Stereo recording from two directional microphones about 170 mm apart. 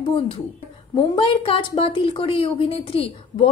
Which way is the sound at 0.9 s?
30° left (ahead or behind).